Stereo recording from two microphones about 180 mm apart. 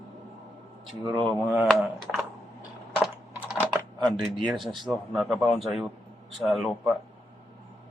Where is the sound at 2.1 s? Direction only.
Centre (ahead or behind).